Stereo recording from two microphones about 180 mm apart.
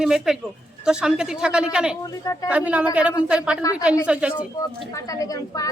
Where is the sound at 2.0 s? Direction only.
20° left (ahead or behind).